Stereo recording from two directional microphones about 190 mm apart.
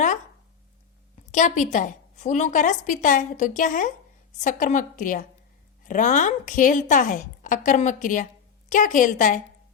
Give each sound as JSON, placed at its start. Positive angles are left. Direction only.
{"t": 1.3, "sound": "a woman's voice", "side_deg": 40}